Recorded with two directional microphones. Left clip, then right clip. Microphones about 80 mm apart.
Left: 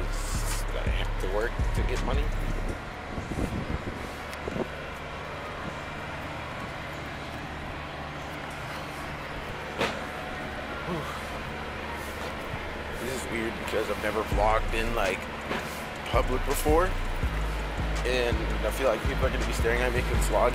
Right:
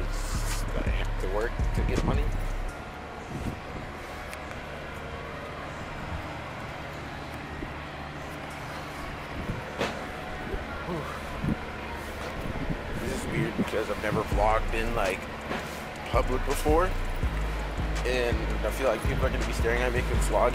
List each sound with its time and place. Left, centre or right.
13.7 s speech: centre
18.0 s speech: centre